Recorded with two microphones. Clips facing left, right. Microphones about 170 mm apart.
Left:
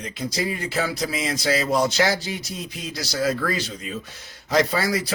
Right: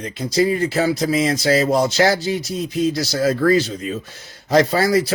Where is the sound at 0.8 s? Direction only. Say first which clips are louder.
Right 6 dB; 40° right (ahead or behind).